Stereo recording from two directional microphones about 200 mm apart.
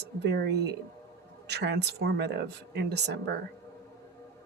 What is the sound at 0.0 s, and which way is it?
Speech, 60° right (ahead or behind).